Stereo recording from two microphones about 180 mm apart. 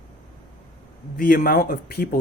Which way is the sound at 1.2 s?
55° left (ahead or behind).